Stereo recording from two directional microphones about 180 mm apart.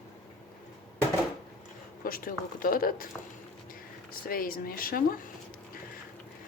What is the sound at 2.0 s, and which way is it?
Speech, 55° left (ahead or behind).